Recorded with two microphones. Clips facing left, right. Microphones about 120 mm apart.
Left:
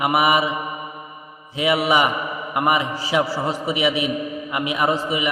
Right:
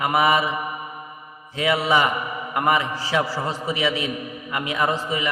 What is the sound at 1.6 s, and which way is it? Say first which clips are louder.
A man's voice: left 2 dB; 15° left (ahead or behind).